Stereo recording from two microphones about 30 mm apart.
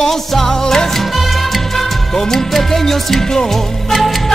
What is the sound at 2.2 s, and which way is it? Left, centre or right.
Music, centre.